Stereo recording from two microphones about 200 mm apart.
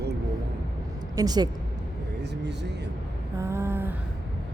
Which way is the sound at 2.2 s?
60° right (ahead or behind).